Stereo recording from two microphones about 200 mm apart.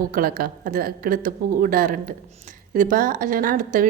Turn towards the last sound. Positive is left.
turn(degrees=-40)  # may be behind; listen again after turning